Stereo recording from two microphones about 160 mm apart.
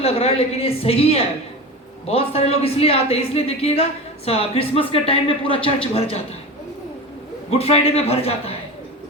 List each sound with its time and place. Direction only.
0.0 s a woman's voice: 40° left (ahead or behind)
7.5 s a woman's voice: 40° left (ahead or behind)